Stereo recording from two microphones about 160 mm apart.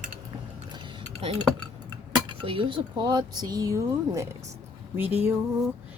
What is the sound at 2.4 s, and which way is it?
Speech, 35° right (ahead or behind).